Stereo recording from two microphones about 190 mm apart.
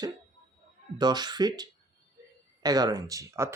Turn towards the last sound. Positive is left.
turn(degrees=-15)  # may be behind; listen again after turning